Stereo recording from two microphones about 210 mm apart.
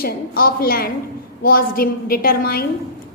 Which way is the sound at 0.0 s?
45° left (ahead or behind).